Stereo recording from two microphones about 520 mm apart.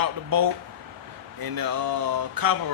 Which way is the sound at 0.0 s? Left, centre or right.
Right.